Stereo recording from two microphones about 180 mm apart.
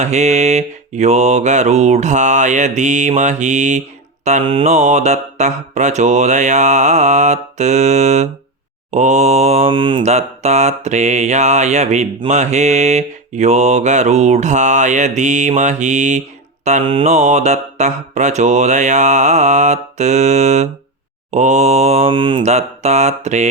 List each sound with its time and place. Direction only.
0.0 s mantra: 40° right (ahead or behind)